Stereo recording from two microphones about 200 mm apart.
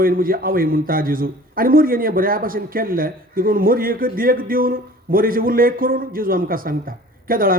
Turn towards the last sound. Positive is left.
turn(degrees=-45)  # may be behind; listen again after turning